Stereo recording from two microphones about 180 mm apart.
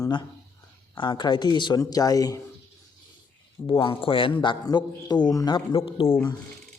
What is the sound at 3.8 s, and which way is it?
A man's voice, 30° left (ahead or behind).